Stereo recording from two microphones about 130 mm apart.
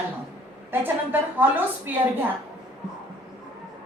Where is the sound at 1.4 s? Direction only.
15° right (ahead or behind).